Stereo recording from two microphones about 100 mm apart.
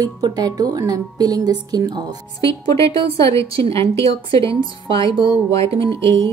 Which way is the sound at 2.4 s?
35° left (ahead or behind).